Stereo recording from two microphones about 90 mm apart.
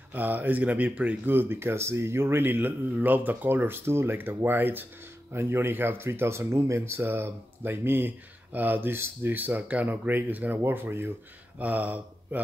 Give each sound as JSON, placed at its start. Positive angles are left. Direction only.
{"t": 0.1, "sound": "speech", "side_deg": -20}